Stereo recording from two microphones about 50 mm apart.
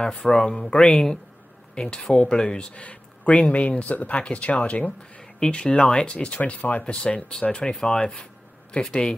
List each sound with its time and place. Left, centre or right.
0.0 s speech: centre
5.2 s speech: centre